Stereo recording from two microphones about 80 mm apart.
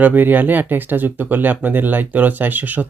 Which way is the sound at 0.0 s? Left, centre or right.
Right.